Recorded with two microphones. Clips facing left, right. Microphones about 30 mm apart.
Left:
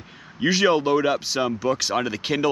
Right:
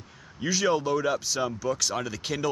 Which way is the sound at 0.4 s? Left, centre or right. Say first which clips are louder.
Left 6 dB; left.